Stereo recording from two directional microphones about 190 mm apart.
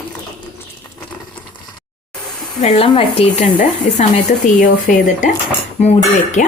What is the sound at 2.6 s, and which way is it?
Speech, 30° left (ahead or behind).